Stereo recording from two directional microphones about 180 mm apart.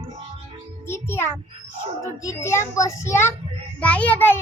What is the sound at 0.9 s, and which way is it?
Music, 15° left (ahead or behind).